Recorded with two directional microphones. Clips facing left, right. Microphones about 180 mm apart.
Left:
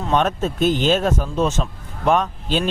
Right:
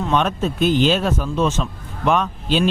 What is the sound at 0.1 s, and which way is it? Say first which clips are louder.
A man's voice: left 2 dB; 45° left (ahead or behind).